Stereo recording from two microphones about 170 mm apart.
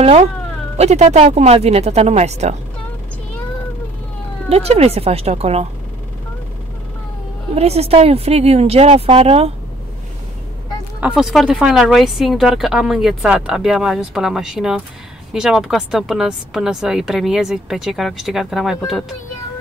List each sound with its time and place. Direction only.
0.0 s speech: 35° right (ahead or behind)
4.5 s speech: 35° right (ahead or behind)
7.5 s speech: 40° right (ahead or behind)
11.0 s a woman's voice: 5° right (ahead or behind)